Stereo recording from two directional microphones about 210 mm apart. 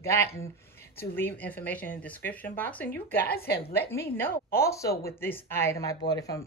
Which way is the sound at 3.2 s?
50° left (ahead or behind).